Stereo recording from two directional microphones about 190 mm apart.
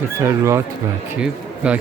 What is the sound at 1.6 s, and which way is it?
Speech, 5° right (ahead or behind).